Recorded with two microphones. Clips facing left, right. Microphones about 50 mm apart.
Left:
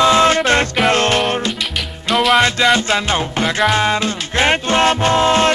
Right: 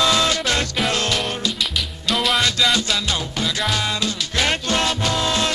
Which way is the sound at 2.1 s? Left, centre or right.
Centre.